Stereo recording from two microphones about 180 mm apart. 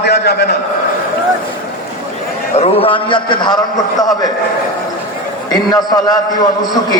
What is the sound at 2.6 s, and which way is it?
Speech, 30° left (ahead or behind).